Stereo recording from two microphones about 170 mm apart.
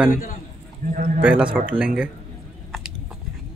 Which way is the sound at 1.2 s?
10° right (ahead or behind).